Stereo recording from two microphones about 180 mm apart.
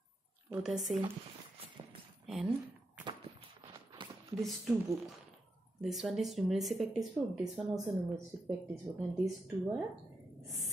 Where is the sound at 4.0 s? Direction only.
25° right (ahead or behind).